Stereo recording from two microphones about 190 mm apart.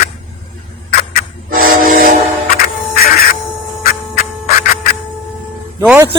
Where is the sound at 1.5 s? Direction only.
45° right (ahead or behind).